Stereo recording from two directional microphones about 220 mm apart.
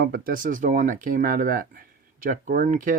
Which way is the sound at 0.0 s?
45° right (ahead or behind).